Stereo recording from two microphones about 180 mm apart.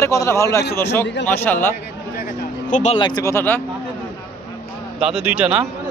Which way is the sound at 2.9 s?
25° left (ahead or behind).